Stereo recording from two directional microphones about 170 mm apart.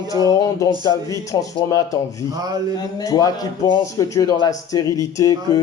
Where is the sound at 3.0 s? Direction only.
20° left (ahead or behind).